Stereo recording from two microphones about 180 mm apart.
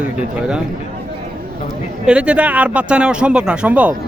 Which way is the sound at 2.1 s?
5° right (ahead or behind).